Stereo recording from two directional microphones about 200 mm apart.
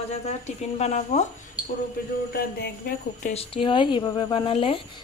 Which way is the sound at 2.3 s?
50° left (ahead or behind).